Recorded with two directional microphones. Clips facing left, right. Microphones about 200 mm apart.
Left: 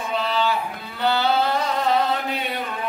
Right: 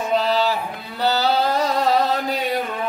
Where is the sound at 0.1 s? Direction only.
35° right (ahead or behind).